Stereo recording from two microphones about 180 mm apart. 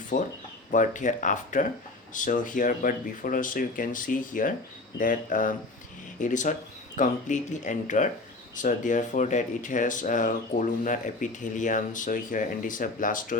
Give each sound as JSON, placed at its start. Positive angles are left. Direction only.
{"t": 0.1, "sound": "speech", "side_deg": 45}